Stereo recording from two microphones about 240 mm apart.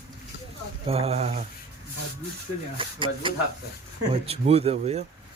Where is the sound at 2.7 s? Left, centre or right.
Right.